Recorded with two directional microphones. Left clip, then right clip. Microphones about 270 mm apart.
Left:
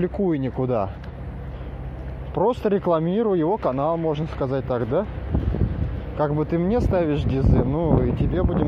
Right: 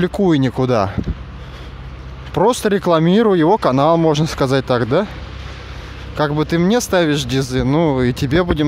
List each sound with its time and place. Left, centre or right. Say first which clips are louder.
0.2 s speech: right 8 dB; right
2.3 s speech: right 6 dB; right
6.1 s speech: right 6 dB; right